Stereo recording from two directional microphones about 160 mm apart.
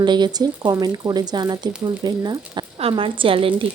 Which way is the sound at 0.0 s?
25° right (ahead or behind).